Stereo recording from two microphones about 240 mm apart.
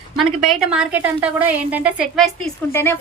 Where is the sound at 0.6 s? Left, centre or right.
Centre.